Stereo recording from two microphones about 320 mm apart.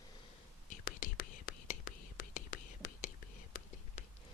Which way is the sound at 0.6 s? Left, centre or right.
Left.